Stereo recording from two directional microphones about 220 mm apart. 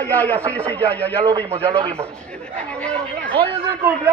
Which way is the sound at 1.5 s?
25° right (ahead or behind).